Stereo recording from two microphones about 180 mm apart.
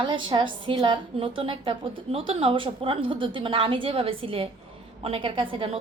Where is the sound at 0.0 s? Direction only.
25° right (ahead or behind).